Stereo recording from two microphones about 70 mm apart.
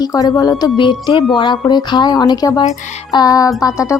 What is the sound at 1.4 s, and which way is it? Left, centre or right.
Speech, left.